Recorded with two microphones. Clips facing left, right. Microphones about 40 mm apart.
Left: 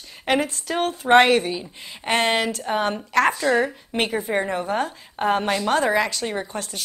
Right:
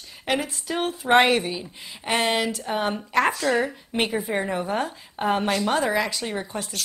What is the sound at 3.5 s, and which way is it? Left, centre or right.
A woman's voice, centre.